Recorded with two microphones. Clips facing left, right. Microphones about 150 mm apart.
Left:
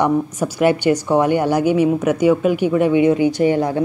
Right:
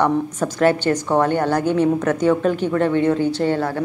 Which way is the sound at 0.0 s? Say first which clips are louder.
Left 1 dB; 10° left (ahead or behind).